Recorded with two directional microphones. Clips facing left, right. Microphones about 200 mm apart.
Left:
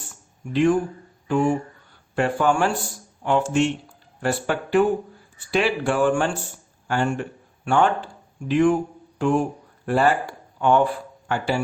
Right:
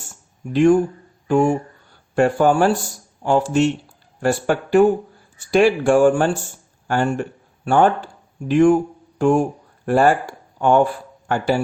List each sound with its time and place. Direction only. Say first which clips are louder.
0.5 s speech: right 5 dB; 45° right (ahead or behind)